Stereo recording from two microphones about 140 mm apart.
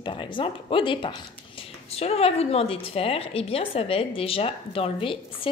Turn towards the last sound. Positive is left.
turn(degrees=40)  # may be behind; listen again after turning